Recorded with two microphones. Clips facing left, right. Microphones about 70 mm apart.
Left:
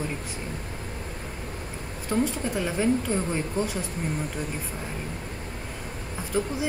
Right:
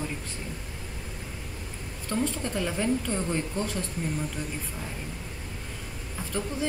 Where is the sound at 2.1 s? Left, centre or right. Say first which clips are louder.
Left 3 dB; centre.